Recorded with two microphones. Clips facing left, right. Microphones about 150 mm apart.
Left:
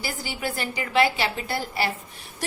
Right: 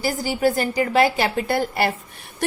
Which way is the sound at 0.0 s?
45° right (ahead or behind).